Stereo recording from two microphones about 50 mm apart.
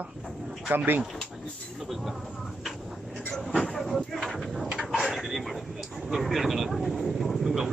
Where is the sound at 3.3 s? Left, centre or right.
Centre.